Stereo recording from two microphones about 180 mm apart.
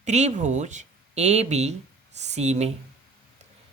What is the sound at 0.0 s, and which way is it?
Speech, 40° right (ahead or behind).